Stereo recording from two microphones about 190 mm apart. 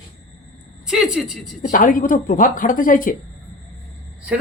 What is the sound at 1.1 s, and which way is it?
Speech, 5° right (ahead or behind).